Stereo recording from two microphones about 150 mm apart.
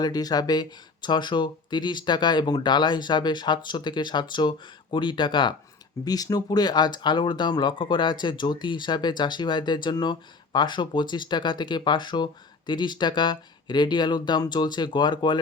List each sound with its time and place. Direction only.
0.0 s speech: 25° left (ahead or behind)